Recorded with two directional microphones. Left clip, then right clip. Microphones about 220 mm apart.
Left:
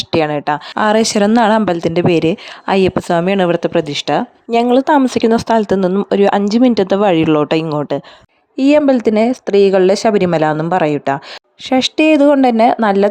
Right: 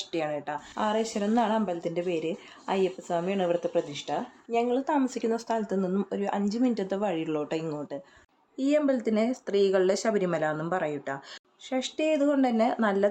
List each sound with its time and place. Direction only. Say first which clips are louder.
0.1 s speech: left 16 dB; 45° left (ahead or behind)